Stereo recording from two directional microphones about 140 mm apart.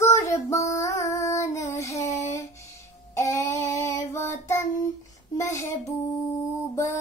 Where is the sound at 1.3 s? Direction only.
20° left (ahead or behind).